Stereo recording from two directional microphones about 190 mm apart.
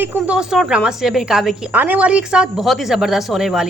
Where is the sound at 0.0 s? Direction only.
10° right (ahead or behind).